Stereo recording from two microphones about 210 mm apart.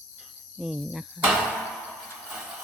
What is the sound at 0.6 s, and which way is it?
Speech, centre (ahead or behind).